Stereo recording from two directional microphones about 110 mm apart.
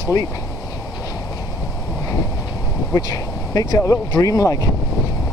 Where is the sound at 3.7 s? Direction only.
35° left (ahead or behind).